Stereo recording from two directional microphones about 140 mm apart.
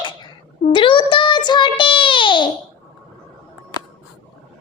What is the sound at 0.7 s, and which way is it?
Child singing, 35° left (ahead or behind).